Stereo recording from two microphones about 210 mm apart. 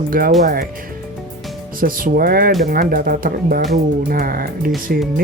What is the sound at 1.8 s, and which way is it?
Speech, 45° right (ahead or behind).